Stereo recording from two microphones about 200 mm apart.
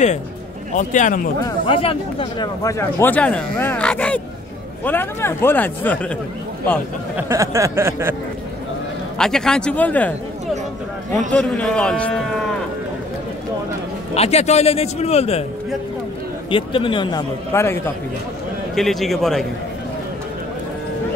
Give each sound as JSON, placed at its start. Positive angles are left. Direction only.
{"t": 0.7, "sound": "a man's voice", "side_deg": 40}
{"t": 1.4, "sound": "speech", "side_deg": 25}
{"t": 7.2, "sound": "speech", "side_deg": -15}
{"t": 9.2, "sound": "speech", "side_deg": 5}
{"t": 11.3, "sound": "speech", "side_deg": 5}
{"t": 14.1, "sound": "a man's voice", "side_deg": 30}
{"t": 16.4, "sound": "speech", "side_deg": 25}
{"t": 17.5, "sound": "speech", "side_deg": 10}
{"t": 18.8, "sound": "speech", "side_deg": 0}